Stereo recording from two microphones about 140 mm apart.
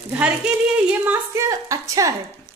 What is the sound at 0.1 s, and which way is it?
Speech, 10° right (ahead or behind).